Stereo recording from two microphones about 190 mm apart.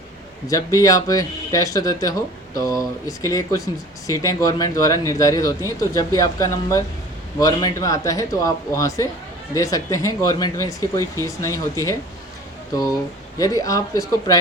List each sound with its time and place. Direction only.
0.4 s speech: 20° left (ahead or behind)
13.4 s speech: 20° left (ahead or behind)